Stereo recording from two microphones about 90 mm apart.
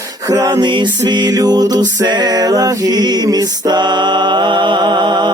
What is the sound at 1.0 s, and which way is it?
Music, 55° right (ahead or behind).